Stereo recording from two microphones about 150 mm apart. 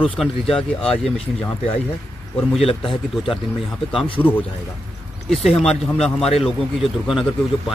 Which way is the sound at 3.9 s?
35° left (ahead or behind).